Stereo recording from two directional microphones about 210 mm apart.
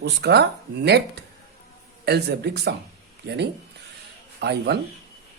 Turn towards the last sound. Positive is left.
turn(degrees=-50)  # may be behind; listen again after turning